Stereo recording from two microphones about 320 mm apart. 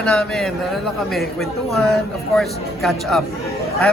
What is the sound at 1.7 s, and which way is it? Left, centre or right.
Speech, centre.